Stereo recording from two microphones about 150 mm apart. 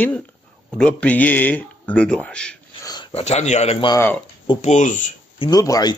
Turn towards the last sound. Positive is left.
turn(degrees=25)  # may be behind; listen again after turning